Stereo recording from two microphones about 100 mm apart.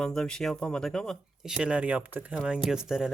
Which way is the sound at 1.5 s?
10° right (ahead or behind).